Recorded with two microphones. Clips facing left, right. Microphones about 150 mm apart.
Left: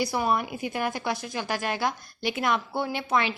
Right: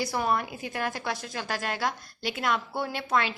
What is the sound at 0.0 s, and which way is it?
A woman's voice, 15° left (ahead or behind).